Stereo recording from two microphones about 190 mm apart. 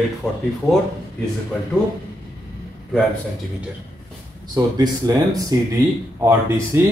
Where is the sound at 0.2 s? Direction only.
5° left (ahead or behind).